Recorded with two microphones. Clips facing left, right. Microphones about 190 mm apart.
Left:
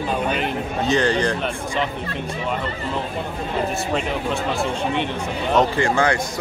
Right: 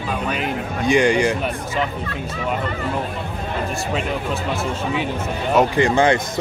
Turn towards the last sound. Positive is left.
turn(degrees=-20)  # may be behind; listen again after turning